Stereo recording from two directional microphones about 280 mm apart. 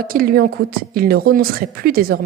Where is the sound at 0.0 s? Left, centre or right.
Right.